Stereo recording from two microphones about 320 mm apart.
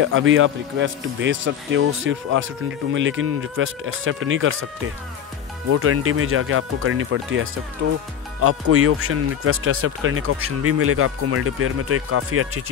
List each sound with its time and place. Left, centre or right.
0.0 s speech: right
5.7 s speech: right